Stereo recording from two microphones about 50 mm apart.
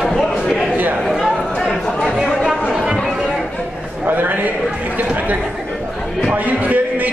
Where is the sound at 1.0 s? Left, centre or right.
Centre.